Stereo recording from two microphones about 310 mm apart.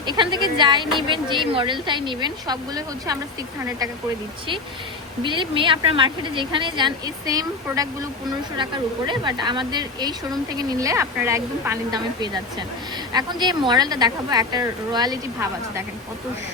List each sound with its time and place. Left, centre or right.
0.0 s a woman's voice: centre
5.2 s a woman's voice: centre